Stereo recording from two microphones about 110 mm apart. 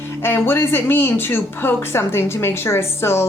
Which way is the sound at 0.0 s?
20° left (ahead or behind).